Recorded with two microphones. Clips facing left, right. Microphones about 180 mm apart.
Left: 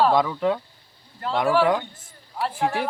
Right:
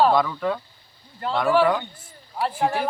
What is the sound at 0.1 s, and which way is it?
Speech, 20° left (ahead or behind).